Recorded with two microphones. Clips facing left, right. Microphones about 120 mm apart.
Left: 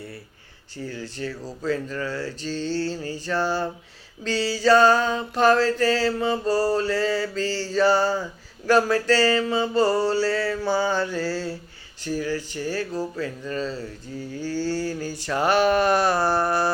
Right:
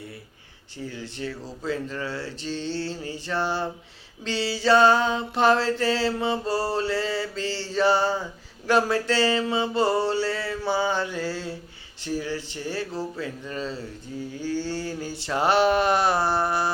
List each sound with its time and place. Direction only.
0.9 s mantra: 20° right (ahead or behind)